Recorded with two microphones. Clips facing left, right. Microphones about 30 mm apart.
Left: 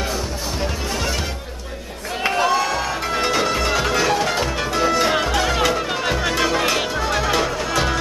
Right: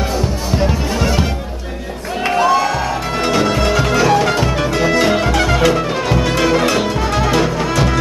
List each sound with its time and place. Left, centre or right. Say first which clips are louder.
0.6 s music: right 8 dB; centre
2.2 s music: right 5 dB; centre
5.6 s music: right 5 dB; centre
7.7 s music: right 2 dB; centre